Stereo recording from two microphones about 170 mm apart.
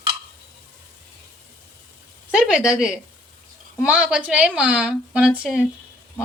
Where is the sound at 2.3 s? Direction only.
5° right (ahead or behind).